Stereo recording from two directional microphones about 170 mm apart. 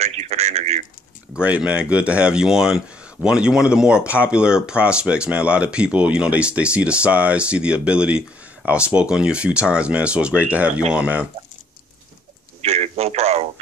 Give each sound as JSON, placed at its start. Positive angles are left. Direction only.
{"t": 0.0, "sound": "a sound", "side_deg": -40}
{"t": 1.3, "sound": "speech", "side_deg": -5}
{"t": 12.6, "sound": "radio", "side_deg": -40}